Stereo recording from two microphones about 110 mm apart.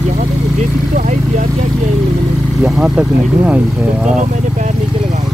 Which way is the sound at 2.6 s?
10° right (ahead or behind).